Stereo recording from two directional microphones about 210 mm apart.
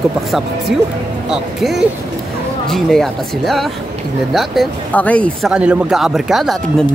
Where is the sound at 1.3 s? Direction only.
Centre (ahead or behind).